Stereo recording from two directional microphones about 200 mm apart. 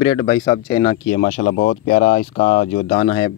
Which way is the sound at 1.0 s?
40° left (ahead or behind).